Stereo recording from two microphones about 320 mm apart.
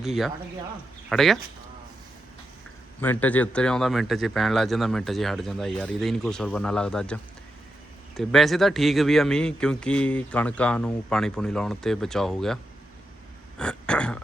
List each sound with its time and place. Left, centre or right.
0.0 s speech: centre
3.0 s speech: centre
13.6 s a sound: centre